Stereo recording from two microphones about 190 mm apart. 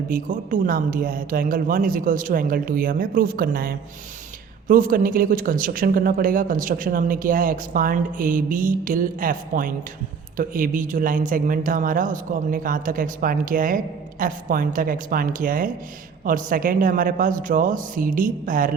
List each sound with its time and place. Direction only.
0.1 s speech: 45° right (ahead or behind)